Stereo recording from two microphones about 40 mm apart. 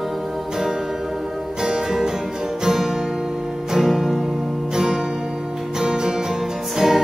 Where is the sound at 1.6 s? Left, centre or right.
Centre.